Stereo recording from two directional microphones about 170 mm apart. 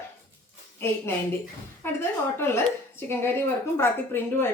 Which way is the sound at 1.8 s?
15° left (ahead or behind).